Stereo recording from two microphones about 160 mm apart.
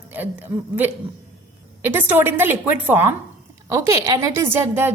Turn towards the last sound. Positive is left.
turn(degrees=-15)  # may be behind; listen again after turning